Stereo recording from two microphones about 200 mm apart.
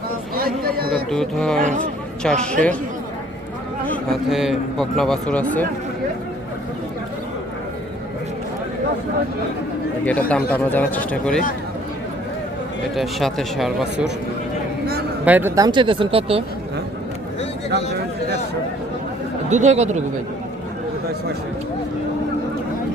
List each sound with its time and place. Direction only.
0.3 s chatter: 50° right (ahead or behind)
1.1 s speech: 5° left (ahead or behind)
4.1 s speech: centre (ahead or behind)
10.1 s speech: 5° left (ahead or behind)
13.0 s speech: centre (ahead or behind)
15.2 s speech: 10° right (ahead or behind); by 16.4 s 25° right (ahead or behind)
19.5 s speech: 35° right (ahead or behind)